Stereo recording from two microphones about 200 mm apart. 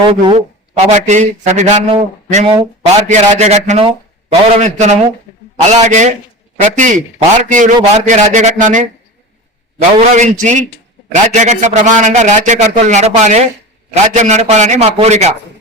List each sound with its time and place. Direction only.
0.0 s a man's voice: 25° right (ahead or behind)
0.9 s a man's voice: 35° right (ahead or behind)
10.2 s a man's voice: 35° right (ahead or behind)